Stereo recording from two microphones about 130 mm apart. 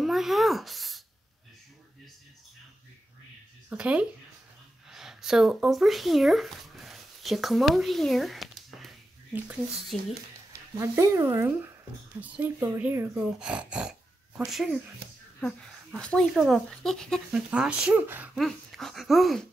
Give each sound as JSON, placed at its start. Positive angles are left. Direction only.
{"t": 0.0, "sound": "a sound", "side_deg": 0}
{"t": 3.7, "sound": "speech", "side_deg": -10}
{"t": 10.8, "sound": "speech", "side_deg": -20}
{"t": 16.0, "sound": "speech", "side_deg": 5}
{"t": 17.5, "sound": "speech", "side_deg": -10}
{"t": 18.4, "sound": "speech", "side_deg": 0}